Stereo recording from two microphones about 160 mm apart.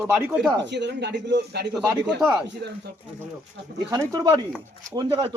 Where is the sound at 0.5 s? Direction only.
90° right.